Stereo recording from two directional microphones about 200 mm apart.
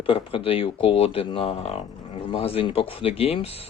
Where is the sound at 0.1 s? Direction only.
25° left (ahead or behind).